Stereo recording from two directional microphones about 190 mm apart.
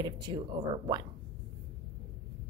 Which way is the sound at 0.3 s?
25° right (ahead or behind).